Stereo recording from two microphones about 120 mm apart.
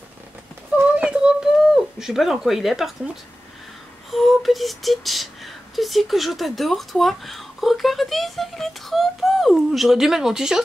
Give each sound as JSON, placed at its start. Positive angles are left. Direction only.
{"t": 0.9, "sound": "speech", "side_deg": -10}
{"t": 4.1, "sound": "speech", "side_deg": 0}